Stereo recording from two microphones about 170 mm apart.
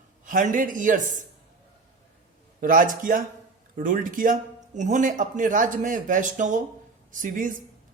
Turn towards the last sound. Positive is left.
turn(degrees=-50)  # may be behind; listen again after turning